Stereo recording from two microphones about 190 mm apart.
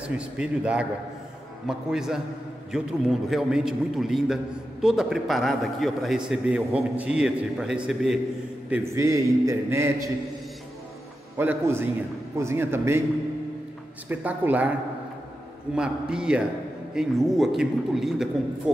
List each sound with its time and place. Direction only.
0.4 s a man's voice: 5° right (ahead or behind)
11.3 s a man's voice: 10° right (ahead or behind)
14.0 s a man's voice: 10° right (ahead or behind)
15.7 s a man's voice: 5° right (ahead or behind)